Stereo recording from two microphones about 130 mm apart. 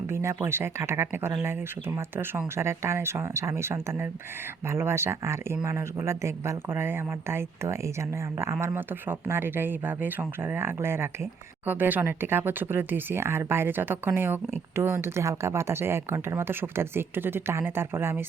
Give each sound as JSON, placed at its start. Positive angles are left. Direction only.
{"t": 0.1, "sound": "speech", "side_deg": -20}